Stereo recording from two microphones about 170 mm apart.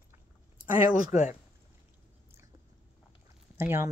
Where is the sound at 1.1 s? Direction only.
10° right (ahead or behind).